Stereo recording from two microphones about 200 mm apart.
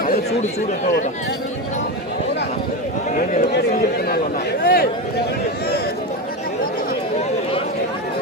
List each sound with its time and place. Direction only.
4.6 s speech: 50° left (ahead or behind)